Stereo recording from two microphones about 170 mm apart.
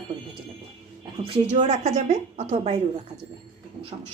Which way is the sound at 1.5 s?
45° right (ahead or behind).